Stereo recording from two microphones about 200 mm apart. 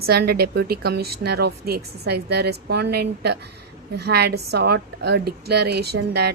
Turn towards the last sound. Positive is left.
turn(degrees=-55)  # may be behind; listen again after turning